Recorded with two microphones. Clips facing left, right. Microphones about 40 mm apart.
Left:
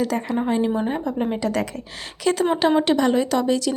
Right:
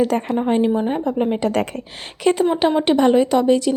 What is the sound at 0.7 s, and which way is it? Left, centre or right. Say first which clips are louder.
Speech: right 3 dB; centre.